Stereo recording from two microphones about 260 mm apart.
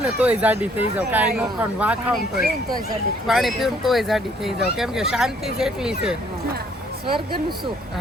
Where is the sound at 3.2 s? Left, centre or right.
Centre.